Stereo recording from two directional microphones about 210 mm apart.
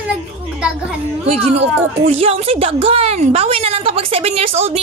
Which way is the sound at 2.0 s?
25° right (ahead or behind).